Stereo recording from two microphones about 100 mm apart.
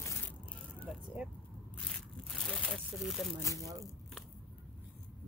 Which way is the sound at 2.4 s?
10° left (ahead or behind).